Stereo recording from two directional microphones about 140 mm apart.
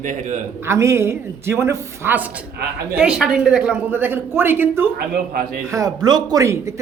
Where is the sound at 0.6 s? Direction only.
20° right (ahead or behind).